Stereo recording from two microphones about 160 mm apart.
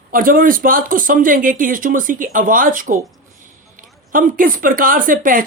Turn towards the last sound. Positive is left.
turn(degrees=-60)  # may be behind; listen again after turning